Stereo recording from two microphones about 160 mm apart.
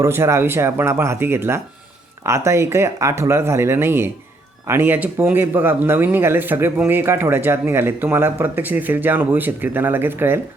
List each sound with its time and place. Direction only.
0.0 s speech: 15° right (ahead or behind)